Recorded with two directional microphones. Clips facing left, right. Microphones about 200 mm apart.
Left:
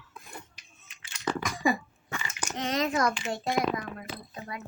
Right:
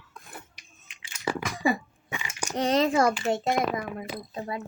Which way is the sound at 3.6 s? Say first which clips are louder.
Right 1 dB; 5° right (ahead or behind).